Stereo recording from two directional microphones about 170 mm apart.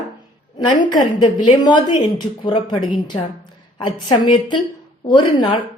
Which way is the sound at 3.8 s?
30° left (ahead or behind).